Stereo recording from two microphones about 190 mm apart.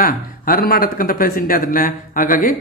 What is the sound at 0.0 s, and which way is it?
A man's voice, 50° left (ahead or behind).